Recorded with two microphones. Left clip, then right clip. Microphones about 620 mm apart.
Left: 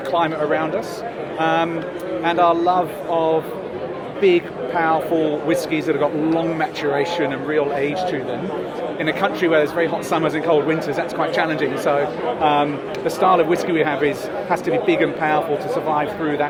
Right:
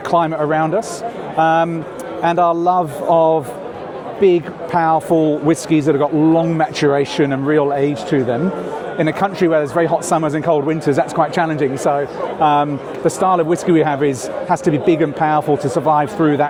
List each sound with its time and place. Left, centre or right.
0.1 s a man's voice: right
9.0 s speech: right